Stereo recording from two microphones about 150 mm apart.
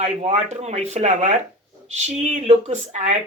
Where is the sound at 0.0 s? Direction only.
45° right (ahead or behind).